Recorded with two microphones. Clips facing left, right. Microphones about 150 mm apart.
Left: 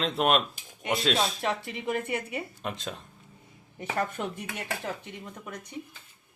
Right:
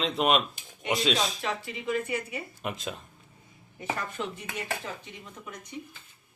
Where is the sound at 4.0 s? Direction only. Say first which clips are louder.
Left 4 dB; 50° left (ahead or behind).